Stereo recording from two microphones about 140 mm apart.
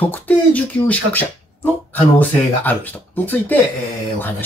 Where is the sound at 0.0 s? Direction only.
10° left (ahead or behind).